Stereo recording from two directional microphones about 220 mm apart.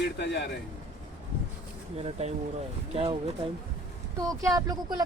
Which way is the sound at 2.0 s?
25° right (ahead or behind).